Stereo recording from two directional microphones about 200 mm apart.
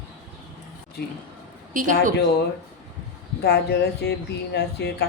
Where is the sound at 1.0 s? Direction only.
55° left (ahead or behind).